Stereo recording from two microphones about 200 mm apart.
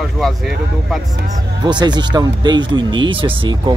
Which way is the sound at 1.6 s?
20° right (ahead or behind).